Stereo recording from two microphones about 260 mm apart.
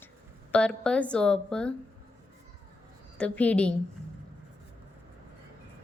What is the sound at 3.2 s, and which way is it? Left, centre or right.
Speech, centre.